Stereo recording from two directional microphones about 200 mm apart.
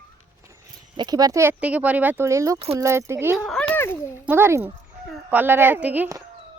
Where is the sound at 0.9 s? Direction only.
20° right (ahead or behind).